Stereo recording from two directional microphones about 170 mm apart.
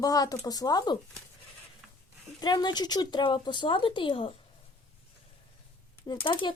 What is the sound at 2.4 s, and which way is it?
Speech, 25° left (ahead or behind).